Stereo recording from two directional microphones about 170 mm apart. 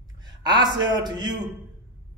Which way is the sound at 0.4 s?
25° right (ahead or behind).